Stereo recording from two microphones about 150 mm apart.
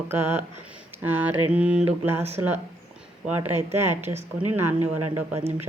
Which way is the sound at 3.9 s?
45° right (ahead or behind).